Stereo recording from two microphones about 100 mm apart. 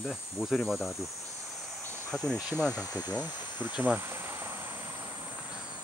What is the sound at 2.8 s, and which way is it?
Speech, 20° right (ahead or behind).